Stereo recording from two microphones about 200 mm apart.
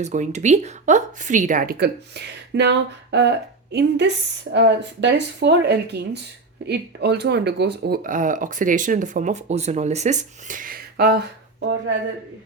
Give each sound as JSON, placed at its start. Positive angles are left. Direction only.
{"t": 0.0, "sound": "a woman's voice", "side_deg": -35}